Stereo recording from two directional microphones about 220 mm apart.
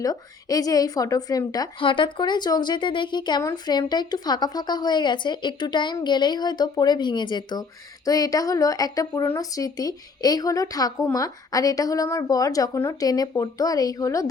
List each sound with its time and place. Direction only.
0.0 s speech: 15° left (ahead or behind)